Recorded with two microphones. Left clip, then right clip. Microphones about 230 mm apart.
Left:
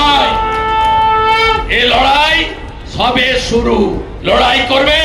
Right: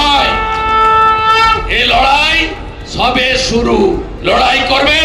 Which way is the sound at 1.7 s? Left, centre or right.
Right.